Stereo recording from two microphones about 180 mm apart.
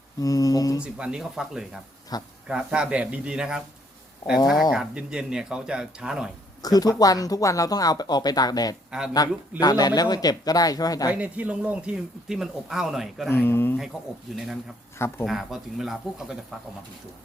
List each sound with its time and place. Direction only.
0.2 s speech: 20° left (ahead or behind)
0.8 s speech: 5° right (ahead or behind)
2.1 s speech: 20° left (ahead or behind)
2.5 s speech: 5° right (ahead or behind)
4.7 s speech: 5° right (ahead or behind)
6.6 s speech: 20° left (ahead or behind)
8.9 s speech: 5° right (ahead or behind)
9.6 s speech: 20° left (ahead or behind)
11.1 s speech: 10° right (ahead or behind)
13.3 s speech: 10° left (ahead or behind)
13.9 s speech: centre (ahead or behind)
15.2 s speech: centre (ahead or behind)